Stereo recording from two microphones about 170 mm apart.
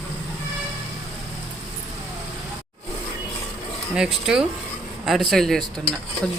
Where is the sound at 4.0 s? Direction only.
5° right (ahead or behind).